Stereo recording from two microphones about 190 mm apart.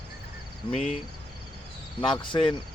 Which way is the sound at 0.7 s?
35° left (ahead or behind).